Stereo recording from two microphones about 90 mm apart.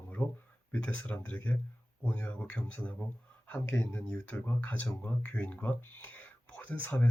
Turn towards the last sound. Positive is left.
turn(degrees=15)  # may be behind; listen again after turning